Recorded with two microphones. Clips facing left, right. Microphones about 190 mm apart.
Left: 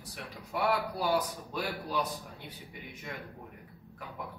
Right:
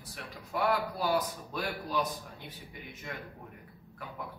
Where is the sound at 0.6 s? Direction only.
15° left (ahead or behind).